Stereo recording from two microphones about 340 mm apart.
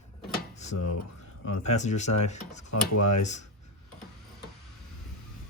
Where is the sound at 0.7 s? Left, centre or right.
Left.